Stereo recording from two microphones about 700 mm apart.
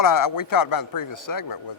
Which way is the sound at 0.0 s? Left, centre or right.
Left.